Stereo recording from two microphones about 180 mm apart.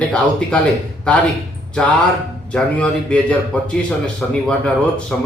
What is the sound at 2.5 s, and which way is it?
A man's voice, 5° left (ahead or behind).